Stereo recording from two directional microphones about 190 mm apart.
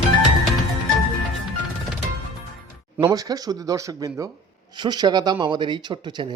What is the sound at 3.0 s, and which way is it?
Speech, 20° right (ahead or behind).